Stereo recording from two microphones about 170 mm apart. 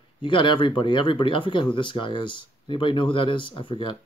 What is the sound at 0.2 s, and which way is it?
Speech, 30° left (ahead or behind).